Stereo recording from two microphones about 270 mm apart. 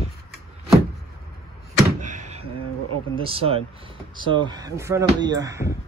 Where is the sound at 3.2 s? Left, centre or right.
Right.